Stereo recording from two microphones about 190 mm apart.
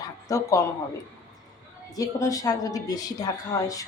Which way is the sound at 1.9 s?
20° left (ahead or behind).